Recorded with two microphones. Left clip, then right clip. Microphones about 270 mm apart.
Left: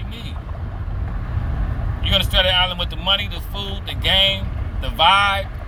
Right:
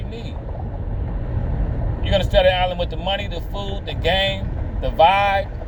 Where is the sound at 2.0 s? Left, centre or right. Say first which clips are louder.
Right 1 dB; centre.